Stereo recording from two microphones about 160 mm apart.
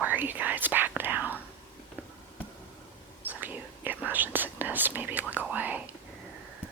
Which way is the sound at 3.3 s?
10° right (ahead or behind).